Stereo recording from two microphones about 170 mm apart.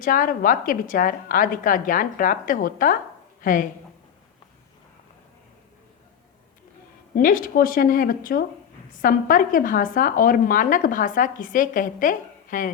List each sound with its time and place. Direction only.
0.0 s a woman's voice: 55° left (ahead or behind)
7.2 s speech: 55° left (ahead or behind)